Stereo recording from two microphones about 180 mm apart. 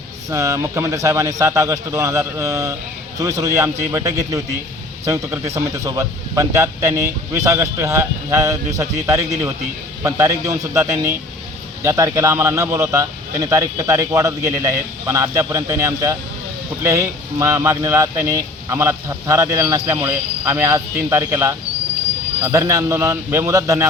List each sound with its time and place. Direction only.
0.3 s speech: 15° right (ahead or behind)